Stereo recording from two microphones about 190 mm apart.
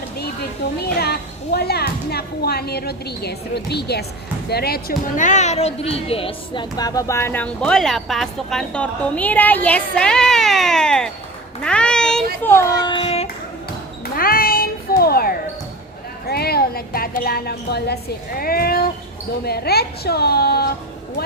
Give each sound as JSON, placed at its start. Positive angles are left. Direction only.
{"t": 0.9, "sound": "speech", "side_deg": 55}
{"t": 14.0, "sound": "basketball bounce", "side_deg": 50}
{"t": 16.2, "sound": "speech", "side_deg": 55}